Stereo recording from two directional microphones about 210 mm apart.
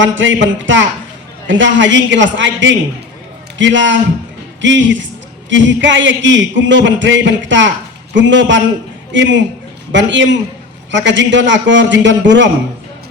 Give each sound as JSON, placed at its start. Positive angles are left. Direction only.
{"t": 0.2, "sound": "a man's voice", "side_deg": -65}